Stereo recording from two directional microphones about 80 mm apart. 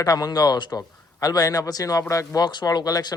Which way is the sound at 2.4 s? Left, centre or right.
Left.